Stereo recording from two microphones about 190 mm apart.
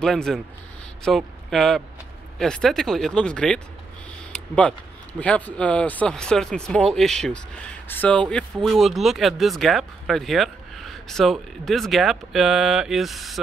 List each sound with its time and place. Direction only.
0.0 s speech: 5° left (ahead or behind)
4.3 s a sound: 5° left (ahead or behind)
5.2 s speech: 5° left (ahead or behind)